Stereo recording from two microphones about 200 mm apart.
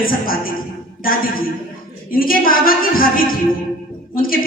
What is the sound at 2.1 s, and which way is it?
Speech, 45° left (ahead or behind).